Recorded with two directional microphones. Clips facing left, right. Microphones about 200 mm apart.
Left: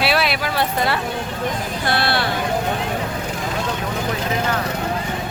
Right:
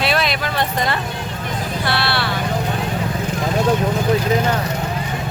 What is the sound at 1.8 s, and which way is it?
Speech, 45° left (ahead or behind).